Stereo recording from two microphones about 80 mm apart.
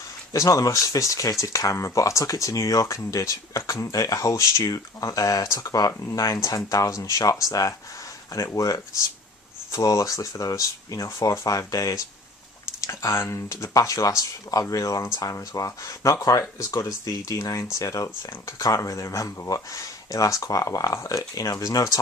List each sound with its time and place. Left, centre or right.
0.3 s speech: left